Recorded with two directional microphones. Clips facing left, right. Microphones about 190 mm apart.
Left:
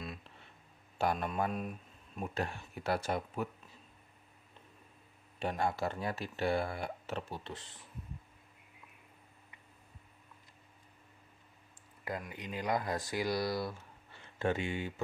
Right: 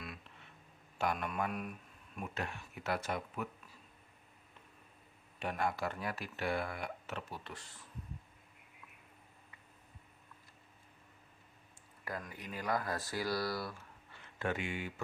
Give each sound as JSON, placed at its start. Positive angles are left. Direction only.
{"t": 0.9, "sound": "a man's voice", "side_deg": 30}
{"t": 5.4, "sound": "speech", "side_deg": 30}
{"t": 12.0, "sound": "speech", "side_deg": 20}